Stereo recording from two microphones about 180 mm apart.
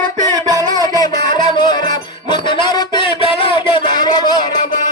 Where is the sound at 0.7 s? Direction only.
20° left (ahead or behind).